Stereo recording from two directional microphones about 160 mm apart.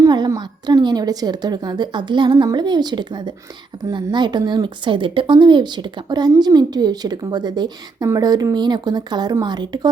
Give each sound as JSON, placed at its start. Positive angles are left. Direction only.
{"t": 0.0, "sound": "a woman's voice", "side_deg": -25}